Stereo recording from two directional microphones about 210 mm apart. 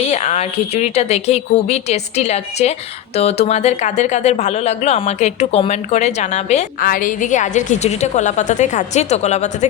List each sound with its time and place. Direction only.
0.0 s speech: 30° left (ahead or behind)